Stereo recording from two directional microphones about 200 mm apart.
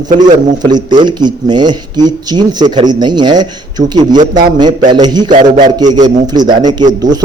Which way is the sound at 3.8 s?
70° right (ahead or behind).